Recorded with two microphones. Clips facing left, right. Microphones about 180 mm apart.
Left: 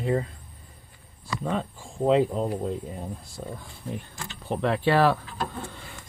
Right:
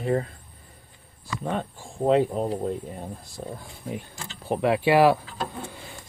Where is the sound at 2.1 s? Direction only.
5° right (ahead or behind).